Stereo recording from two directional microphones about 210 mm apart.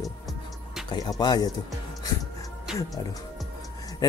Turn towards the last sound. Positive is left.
turn(degrees=20)  # may be behind; listen again after turning